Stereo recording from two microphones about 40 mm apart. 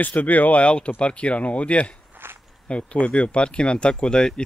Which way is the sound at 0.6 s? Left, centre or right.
Left.